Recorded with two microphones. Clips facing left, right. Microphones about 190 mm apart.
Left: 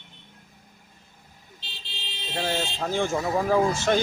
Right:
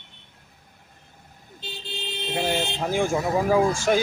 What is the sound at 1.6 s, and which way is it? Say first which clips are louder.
Vehicle: right 11 dB; 50° right (ahead or behind).